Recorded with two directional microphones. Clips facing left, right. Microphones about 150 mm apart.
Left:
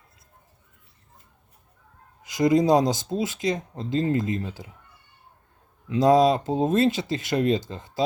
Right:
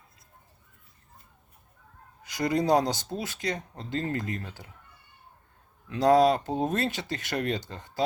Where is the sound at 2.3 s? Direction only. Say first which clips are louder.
Left 5 dB; 15° left (ahead or behind).